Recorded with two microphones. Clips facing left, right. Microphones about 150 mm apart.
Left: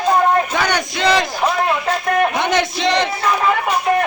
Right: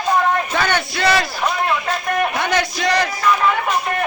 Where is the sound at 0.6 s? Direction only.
15° left (ahead or behind).